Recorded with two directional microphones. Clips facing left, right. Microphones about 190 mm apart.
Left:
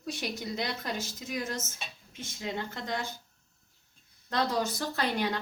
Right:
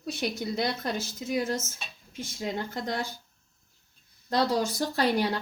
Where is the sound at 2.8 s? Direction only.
40° right (ahead or behind).